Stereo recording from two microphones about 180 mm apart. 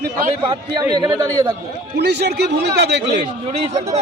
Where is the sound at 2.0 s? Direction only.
70° right (ahead or behind).